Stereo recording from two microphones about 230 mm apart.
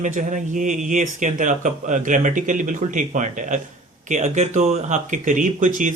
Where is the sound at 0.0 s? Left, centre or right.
Right.